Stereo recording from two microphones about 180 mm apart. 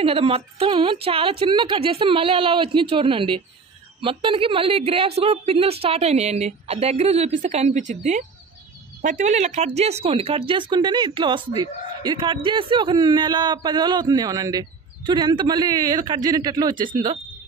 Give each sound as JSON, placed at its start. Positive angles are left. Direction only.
{"t": 0.0, "sound": "a woman's voice", "side_deg": -30}